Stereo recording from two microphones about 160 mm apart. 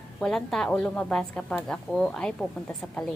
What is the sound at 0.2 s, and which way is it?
A woman's voice, centre (ahead or behind).